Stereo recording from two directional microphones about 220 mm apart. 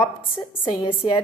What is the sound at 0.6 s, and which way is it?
Speech, 20° left (ahead or behind).